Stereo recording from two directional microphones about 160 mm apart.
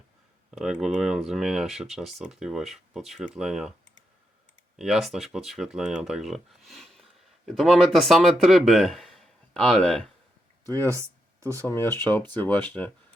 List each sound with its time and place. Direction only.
0.5 s speech: centre (ahead or behind)
4.8 s speech: centre (ahead or behind)
6.7 s a sound: centre (ahead or behind)
7.4 s speech: centre (ahead or behind)
10.8 s speech: 15° right (ahead or behind)
11.6 s speech: 15° left (ahead or behind)